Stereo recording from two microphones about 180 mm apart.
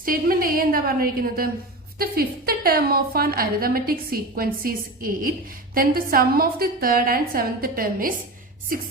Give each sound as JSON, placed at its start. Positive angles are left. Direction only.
{"t": 0.0, "sound": "a woman's voice", "side_deg": -50}